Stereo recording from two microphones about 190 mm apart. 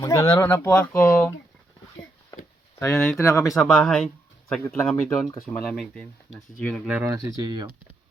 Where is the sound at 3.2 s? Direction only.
15° left (ahead or behind).